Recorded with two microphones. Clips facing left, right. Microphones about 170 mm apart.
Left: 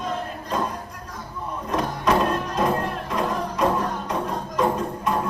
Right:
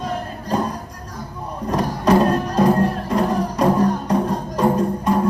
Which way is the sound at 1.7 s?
35° right (ahead or behind).